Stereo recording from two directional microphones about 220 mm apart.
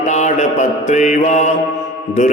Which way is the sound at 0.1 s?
30° left (ahead or behind).